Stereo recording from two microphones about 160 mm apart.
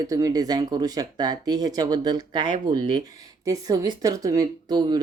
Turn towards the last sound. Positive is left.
turn(degrees=-25)  # may be behind; listen again after turning